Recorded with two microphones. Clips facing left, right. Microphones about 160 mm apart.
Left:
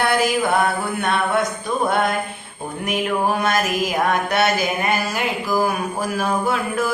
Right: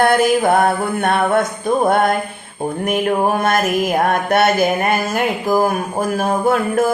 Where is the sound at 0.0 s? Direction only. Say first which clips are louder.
Right 5 dB; 50° right (ahead or behind).